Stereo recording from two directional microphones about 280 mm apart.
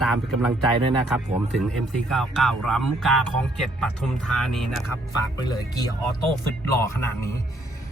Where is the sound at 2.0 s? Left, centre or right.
Centre.